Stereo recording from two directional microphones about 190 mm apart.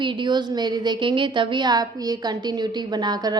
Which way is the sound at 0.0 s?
25° right (ahead or behind).